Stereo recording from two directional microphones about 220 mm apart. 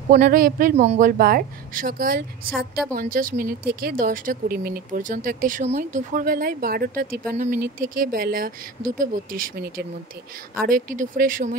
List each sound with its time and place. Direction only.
0.1 s speech: 40° right (ahead or behind)